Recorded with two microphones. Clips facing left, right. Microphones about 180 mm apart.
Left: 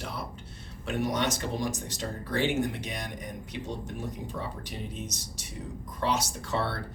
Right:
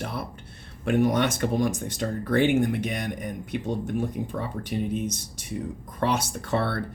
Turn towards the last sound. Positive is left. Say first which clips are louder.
# right 5 dB
turn(degrees=-55)  # may be behind; listen again after turning